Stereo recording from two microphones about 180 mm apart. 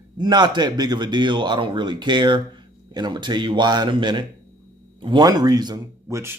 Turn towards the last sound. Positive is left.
turn(degrees=-15)  # may be behind; listen again after turning